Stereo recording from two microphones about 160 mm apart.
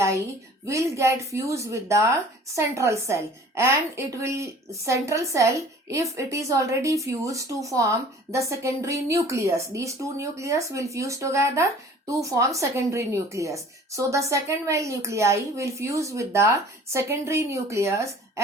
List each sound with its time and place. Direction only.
0.7 s a woman's voice: 20° right (ahead or behind)